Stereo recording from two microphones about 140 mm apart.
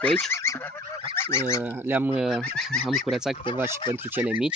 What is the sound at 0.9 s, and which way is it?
Goose, 20° left (ahead or behind).